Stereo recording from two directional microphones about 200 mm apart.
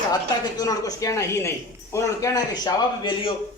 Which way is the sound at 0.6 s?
15° left (ahead or behind).